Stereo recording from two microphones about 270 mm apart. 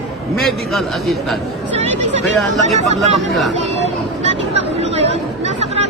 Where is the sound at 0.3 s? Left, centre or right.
Centre.